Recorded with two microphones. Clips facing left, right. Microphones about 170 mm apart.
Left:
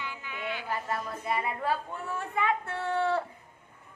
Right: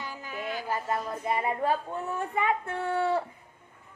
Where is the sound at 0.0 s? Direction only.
40° right (ahead or behind).